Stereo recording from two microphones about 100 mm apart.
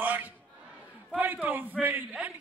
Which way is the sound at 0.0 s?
20° right (ahead or behind).